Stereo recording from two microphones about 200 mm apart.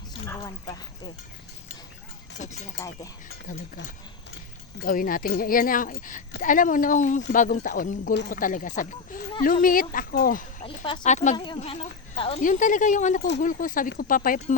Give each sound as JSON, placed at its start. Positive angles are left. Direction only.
{"t": 0.3, "sound": "speech", "side_deg": 15}
{"t": 2.4, "sound": "speech", "side_deg": 35}
{"t": 4.8, "sound": "speech", "side_deg": 45}
{"t": 10.6, "sound": "speech", "side_deg": 30}
{"t": 11.0, "sound": "speech", "side_deg": 35}
{"t": 11.3, "sound": "speech", "side_deg": 25}
{"t": 12.4, "sound": "speech", "side_deg": 40}